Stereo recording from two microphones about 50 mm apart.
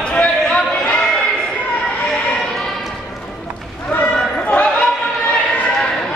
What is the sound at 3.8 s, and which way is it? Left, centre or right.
Run, left.